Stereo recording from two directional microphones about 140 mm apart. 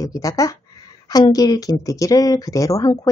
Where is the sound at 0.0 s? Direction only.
25° left (ahead or behind).